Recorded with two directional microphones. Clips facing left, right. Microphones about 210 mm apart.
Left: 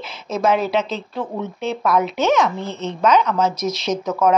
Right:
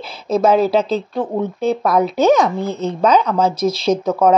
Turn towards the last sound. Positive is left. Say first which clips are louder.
# right 4 dB
turn(degrees=-30)  # may be behind; listen again after turning